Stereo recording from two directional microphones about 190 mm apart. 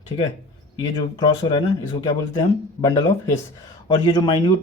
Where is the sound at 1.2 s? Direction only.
25° left (ahead or behind).